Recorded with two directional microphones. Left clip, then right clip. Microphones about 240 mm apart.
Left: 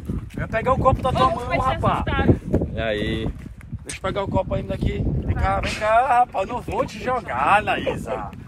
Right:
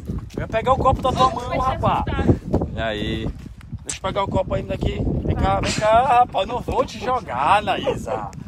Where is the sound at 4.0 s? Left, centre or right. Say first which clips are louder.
Right 2 dB; right.